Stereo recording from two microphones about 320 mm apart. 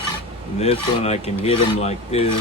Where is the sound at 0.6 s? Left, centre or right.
Centre.